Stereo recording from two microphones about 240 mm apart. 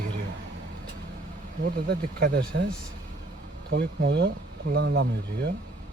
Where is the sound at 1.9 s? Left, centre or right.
Right.